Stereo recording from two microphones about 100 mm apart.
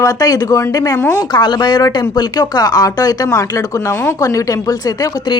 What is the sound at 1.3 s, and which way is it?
A woman's voice, 50° left (ahead or behind).